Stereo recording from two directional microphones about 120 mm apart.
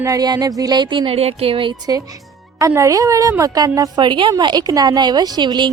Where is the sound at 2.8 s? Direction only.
30° right (ahead or behind).